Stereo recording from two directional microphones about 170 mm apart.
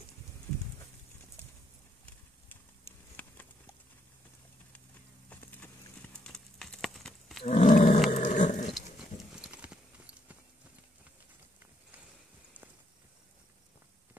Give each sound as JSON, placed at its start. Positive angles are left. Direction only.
{"t": 3.2, "sound": "clip-clop", "side_deg": 10}
{"t": 5.3, "sound": "clip-clop", "side_deg": 10}
{"t": 7.4, "sound": "roaring cats", "side_deg": 45}
{"t": 8.1, "sound": "dog", "side_deg": 45}
{"t": 8.6, "sound": "horse", "side_deg": 0}